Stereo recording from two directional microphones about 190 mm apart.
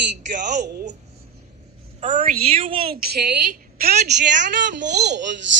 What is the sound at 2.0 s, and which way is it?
Speech, 40° right (ahead or behind).